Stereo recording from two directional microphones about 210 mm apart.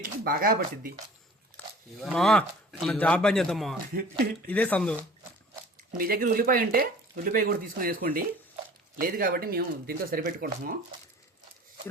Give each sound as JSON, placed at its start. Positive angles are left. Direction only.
{"t": 0.0, "sound": "speech", "side_deg": -45}
{"t": 1.6, "sound": "a sound", "side_deg": 5}
{"t": 2.0, "sound": "speech", "side_deg": 5}
{"t": 6.0, "sound": "speech", "side_deg": -45}